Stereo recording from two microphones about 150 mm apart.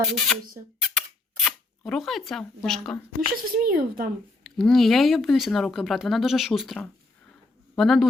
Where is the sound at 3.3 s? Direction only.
75° right (ahead or behind).